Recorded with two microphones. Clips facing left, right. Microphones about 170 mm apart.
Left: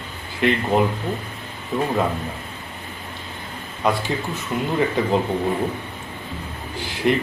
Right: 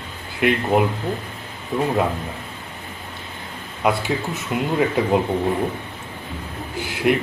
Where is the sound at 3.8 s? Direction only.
10° right (ahead or behind).